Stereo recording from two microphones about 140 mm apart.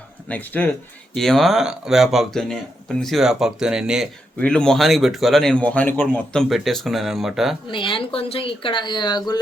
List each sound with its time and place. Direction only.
0.3 s a man's voice: 10° left (ahead or behind); by 4.1 s 5° right (ahead or behind)
4.4 s a man's voice: 5° left (ahead or behind)
7.7 s speech: 35° left (ahead or behind)